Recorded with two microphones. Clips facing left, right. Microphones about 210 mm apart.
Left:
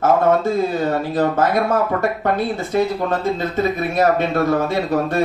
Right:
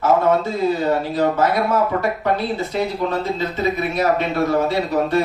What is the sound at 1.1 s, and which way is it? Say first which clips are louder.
A man's voice: left 1 dB; 50° left (ahead or behind).